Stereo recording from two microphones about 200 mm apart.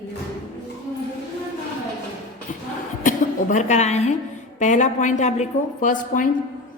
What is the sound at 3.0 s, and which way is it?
A woman's voice, 40° left (ahead or behind).